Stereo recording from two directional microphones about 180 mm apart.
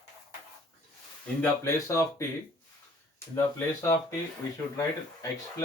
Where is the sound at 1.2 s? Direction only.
10° left (ahead or behind).